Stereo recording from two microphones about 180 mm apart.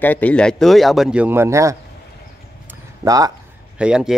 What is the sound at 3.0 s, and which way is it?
Speech, 20° right (ahead or behind).